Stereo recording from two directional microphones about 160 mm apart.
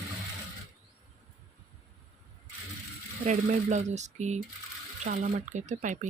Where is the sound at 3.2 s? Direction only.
50° right (ahead or behind).